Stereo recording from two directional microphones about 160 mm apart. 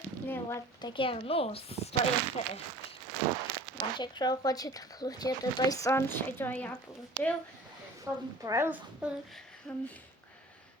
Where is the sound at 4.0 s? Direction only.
25° left (ahead or behind); by 6.7 s 10° left (ahead or behind).